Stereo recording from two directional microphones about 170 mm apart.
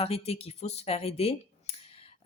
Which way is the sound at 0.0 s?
35° left (ahead or behind).